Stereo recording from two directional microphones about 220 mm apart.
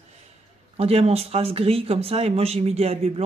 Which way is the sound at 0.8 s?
25° right (ahead or behind).